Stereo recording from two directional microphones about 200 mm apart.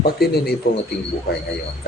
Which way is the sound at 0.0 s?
50° left (ahead or behind).